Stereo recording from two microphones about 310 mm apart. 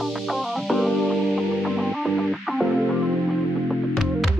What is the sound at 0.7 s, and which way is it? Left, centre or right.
Music, centre.